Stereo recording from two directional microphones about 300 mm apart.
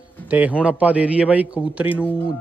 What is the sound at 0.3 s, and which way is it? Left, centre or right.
A man's voice, centre.